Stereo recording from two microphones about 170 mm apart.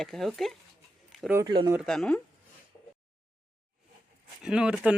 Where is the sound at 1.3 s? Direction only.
25° right (ahead or behind).